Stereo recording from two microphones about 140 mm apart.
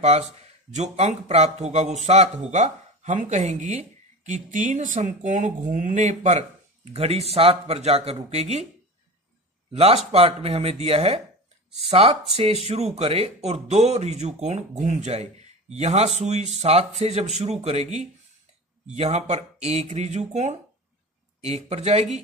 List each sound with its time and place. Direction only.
0.7 s speech: 55° right (ahead or behind)
9.7 s speech: 45° right (ahead or behind)